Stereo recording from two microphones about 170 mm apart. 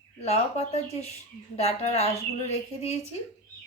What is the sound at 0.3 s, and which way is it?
Speech, 40° left (ahead or behind).